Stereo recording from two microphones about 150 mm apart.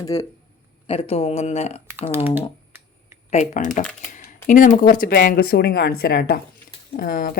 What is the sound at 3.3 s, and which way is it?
Speech, 50° left (ahead or behind).